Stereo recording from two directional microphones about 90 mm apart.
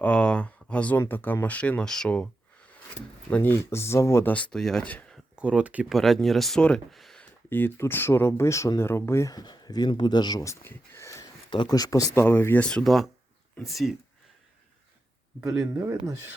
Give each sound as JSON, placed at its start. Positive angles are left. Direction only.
{"t": 0.0, "sound": "a sound", "side_deg": 10}
{"t": 0.9, "sound": "speech", "side_deg": 20}
{"t": 3.2, "sound": "speech", "side_deg": 25}
{"t": 4.3, "sound": "speech", "side_deg": 15}
{"t": 5.4, "sound": "speech", "side_deg": -15}
{"t": 5.9, "sound": "speech", "side_deg": 5}
{"t": 7.2, "sound": "speech", "side_deg": 20}
{"t": 9.3, "sound": "speech", "side_deg": 50}
{"t": 10.4, "sound": "speech", "side_deg": 30}
{"t": 11.7, "sound": "speech", "side_deg": 45}
{"t": 12.1, "sound": "speech", "side_deg": 25}
{"t": 12.6, "sound": "speech", "side_deg": 5}
{"t": 15.4, "sound": "speech", "side_deg": -5}